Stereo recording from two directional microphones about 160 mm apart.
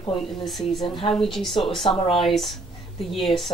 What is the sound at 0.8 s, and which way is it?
Speech, 30° left (ahead or behind).